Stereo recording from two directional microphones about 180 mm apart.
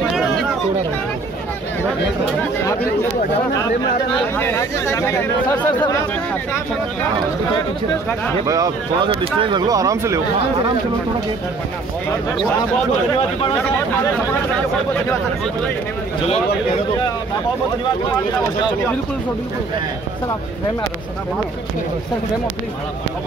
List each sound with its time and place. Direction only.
0.1 s a sound: centre (ahead or behind)
4.4 s speech: 15° left (ahead or behind)
8.5 s speech: 20° right (ahead or behind)